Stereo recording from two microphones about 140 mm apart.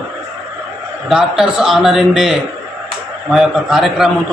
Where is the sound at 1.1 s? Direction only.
5° right (ahead or behind).